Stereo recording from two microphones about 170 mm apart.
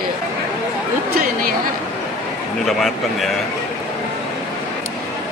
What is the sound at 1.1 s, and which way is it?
Chatter, 60° right (ahead or behind).